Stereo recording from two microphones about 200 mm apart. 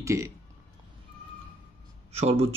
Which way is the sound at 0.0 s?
15° right (ahead or behind).